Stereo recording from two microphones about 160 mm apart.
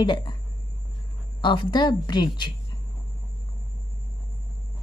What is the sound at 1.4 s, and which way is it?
A woman's voice, 30° left (ahead or behind).